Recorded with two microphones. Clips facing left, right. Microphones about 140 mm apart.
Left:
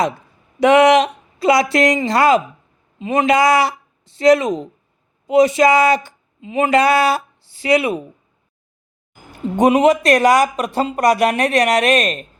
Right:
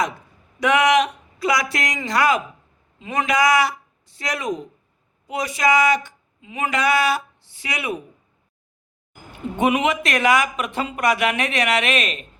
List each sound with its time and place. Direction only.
0.6 s speech: 30° left (ahead or behind)
9.6 s speech: 35° left (ahead or behind)